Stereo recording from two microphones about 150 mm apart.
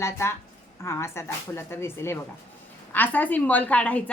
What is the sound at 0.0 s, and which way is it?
A woman's voice, 15° left (ahead or behind).